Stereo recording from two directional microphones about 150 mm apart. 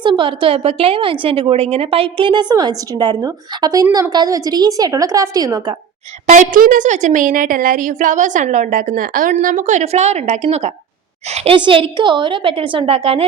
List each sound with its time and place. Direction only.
0.0 s a woman's voice: 30° right (ahead or behind)
6.2 s a woman's voice: 55° right (ahead or behind)
11.5 s a woman's voice: 35° right (ahead or behind)